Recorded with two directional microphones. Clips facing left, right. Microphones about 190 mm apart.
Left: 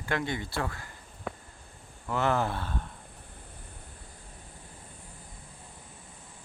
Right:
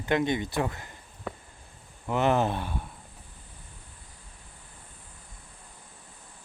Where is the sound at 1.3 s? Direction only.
Centre (ahead or behind).